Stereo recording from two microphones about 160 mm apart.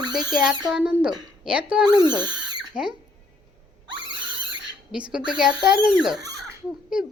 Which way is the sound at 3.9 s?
30° right (ahead or behind).